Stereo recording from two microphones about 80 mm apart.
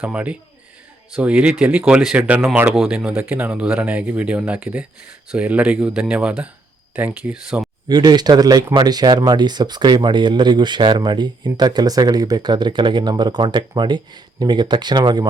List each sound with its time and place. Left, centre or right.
0.0 s speech: centre
2.1 s speech: centre
2.7 s speech: centre
7.9 s speech: right